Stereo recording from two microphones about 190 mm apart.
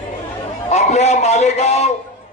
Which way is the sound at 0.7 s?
35° left (ahead or behind).